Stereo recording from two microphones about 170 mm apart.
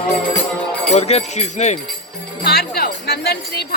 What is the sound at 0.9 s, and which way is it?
Speech, 40° left (ahead or behind).